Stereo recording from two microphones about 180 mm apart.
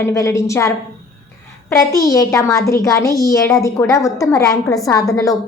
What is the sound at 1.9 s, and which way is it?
A child's voice, 20° left (ahead or behind).